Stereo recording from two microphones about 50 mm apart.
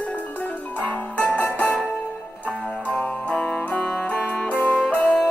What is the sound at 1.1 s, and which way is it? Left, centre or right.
Music, left.